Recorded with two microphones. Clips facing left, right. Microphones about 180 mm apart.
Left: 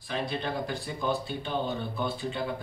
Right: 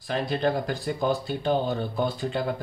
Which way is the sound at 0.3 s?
40° right (ahead or behind).